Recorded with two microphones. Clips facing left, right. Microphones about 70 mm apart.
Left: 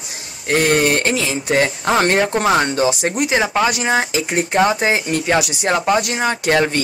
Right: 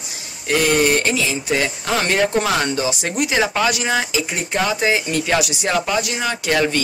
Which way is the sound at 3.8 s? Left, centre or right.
Left.